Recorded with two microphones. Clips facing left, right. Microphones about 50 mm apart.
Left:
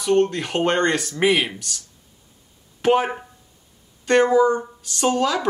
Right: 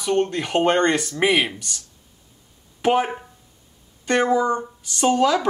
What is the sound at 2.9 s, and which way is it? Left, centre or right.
Speech, centre.